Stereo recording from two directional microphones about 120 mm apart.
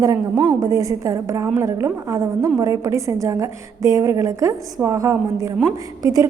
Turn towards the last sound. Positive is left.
turn(degrees=-30)  # may be behind; listen again after turning